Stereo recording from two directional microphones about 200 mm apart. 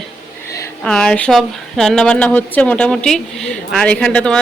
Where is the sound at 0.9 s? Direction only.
5° left (ahead or behind).